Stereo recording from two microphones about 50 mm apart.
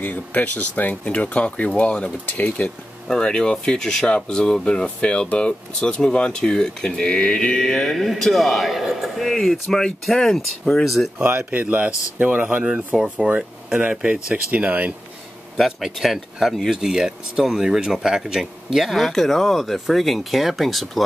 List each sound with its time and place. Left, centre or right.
0.0 s speech: left
2.6 s speech: left
3.1 s speech: centre
11.1 s speech: right
12.6 s speech: centre
15.5 s speech: centre